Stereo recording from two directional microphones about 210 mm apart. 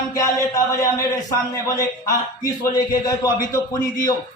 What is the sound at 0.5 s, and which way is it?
Speech, 15° left (ahead or behind).